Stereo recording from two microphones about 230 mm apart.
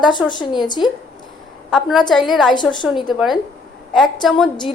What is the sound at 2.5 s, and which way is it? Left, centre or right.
Speech, centre.